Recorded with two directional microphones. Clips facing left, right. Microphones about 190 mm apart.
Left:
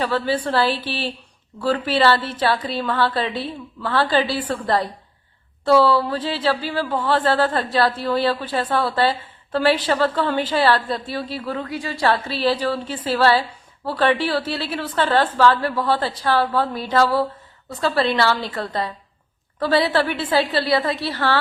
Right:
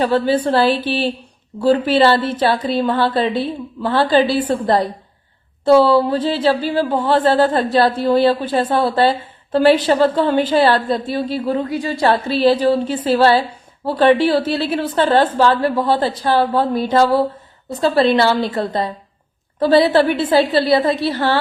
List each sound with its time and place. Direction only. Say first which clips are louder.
0.4 s a woman's voice: right 5 dB; 20° right (ahead or behind)